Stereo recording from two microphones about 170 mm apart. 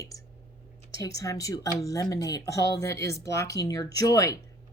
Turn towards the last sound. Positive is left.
turn(degrees=20)  # may be behind; listen again after turning